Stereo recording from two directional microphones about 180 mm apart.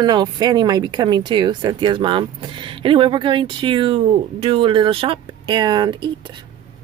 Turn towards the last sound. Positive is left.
turn(degrees=-25)  # may be behind; listen again after turning